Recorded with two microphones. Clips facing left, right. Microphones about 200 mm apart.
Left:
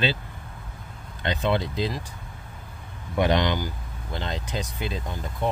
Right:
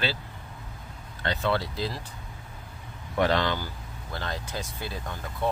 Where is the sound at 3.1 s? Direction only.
15° left (ahead or behind).